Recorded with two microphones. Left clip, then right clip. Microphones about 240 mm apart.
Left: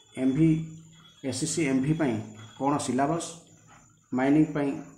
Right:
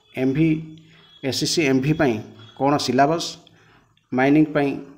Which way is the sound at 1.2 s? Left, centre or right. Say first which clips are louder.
Right 8 dB; right.